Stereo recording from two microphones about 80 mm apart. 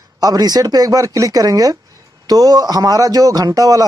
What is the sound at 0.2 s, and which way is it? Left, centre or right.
A man's voice, right.